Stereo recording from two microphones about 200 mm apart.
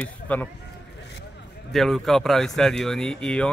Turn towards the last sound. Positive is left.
turn(degrees=5)  # may be behind; listen again after turning